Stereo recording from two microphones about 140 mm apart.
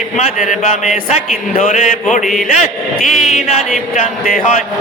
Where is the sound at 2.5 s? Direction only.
60° left (ahead or behind).